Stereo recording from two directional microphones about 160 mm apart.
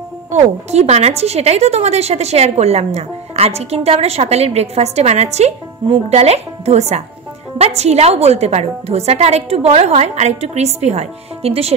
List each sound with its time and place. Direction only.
0.3 s speech: 45° right (ahead or behind)